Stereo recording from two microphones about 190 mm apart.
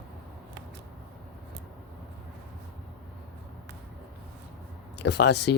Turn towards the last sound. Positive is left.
turn(degrees=60)  # may be behind; listen again after turning